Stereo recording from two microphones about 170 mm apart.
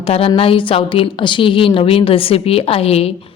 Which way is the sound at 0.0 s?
35° left (ahead or behind).